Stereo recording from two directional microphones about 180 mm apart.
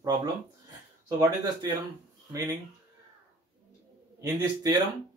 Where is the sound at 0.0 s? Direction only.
20° right (ahead or behind).